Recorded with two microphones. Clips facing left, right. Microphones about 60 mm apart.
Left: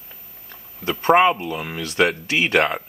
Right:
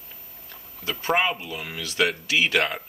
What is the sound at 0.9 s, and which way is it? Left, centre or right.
Speech, left.